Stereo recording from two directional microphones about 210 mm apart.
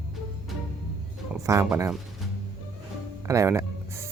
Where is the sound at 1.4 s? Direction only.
10° right (ahead or behind).